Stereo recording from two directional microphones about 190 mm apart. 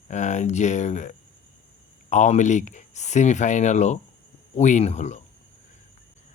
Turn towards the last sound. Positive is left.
turn(degrees=35)  # may be behind; listen again after turning